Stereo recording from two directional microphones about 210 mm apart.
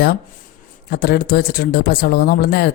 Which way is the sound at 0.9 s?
50° left (ahead or behind).